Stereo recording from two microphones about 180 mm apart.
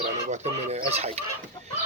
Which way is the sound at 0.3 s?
35° right (ahead or behind).